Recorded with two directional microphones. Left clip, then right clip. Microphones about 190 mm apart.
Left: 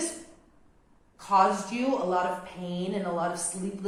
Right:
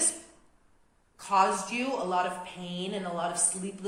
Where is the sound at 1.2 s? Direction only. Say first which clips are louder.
Left 2 dB; 30° right (ahead or behind).